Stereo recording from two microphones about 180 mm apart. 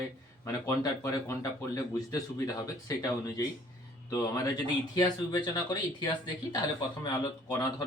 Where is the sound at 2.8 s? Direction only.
20° left (ahead or behind).